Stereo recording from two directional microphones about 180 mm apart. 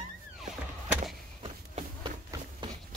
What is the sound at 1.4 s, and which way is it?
Run, 30° right (ahead or behind).